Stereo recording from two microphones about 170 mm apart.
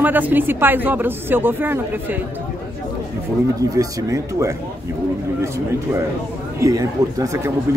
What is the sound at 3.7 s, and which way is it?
Speech, 20° right (ahead or behind).